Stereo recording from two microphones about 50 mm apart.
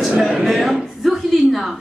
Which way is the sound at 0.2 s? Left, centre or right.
Centre.